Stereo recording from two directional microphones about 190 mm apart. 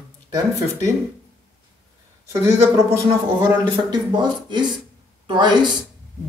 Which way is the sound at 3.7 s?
20° right (ahead or behind).